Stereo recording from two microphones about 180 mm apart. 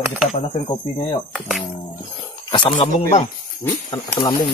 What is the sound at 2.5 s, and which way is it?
Speech, 30° left (ahead or behind).